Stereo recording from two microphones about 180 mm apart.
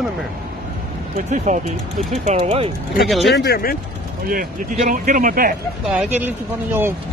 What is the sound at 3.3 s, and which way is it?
Speech, 65° left (ahead or behind).